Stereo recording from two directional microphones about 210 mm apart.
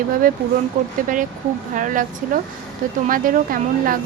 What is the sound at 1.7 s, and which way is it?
Speech, 40° right (ahead or behind).